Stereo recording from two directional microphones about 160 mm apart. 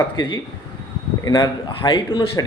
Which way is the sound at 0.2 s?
25° left (ahead or behind).